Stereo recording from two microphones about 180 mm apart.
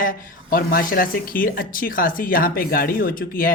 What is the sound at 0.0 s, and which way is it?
Speech, 50° left (ahead or behind).